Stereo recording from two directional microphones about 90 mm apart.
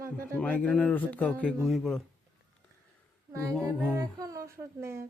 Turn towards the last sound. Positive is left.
turn(degrees=-30)  # may be behind; listen again after turning